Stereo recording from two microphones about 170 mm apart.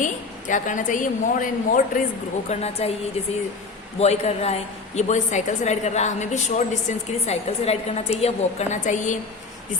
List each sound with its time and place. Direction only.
0.0 s a woman's voice: 50° left (ahead or behind)
2.5 s a man's voice: 40° left (ahead or behind)
4.0 s a man's voice: 40° left (ahead or behind)